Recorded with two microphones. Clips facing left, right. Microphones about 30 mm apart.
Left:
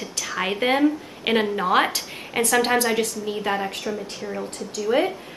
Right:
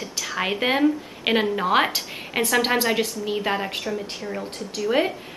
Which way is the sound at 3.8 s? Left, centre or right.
Centre.